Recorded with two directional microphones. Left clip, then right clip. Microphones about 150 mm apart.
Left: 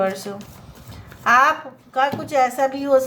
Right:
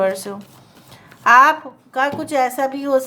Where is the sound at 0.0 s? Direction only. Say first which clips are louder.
Right 3 dB; 35° right (ahead or behind).